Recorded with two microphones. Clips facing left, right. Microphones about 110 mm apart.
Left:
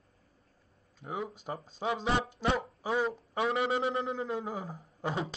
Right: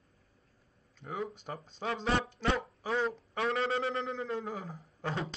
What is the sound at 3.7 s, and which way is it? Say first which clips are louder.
Speech: left 2 dB; 25° left (ahead or behind).